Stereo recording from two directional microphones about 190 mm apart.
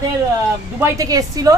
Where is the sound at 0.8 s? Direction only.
20° right (ahead or behind).